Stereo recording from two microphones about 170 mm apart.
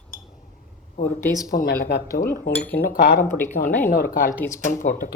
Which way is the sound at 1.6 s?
70° left (ahead or behind).